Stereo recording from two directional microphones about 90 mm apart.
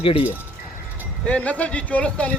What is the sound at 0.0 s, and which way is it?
Speech, 90° left.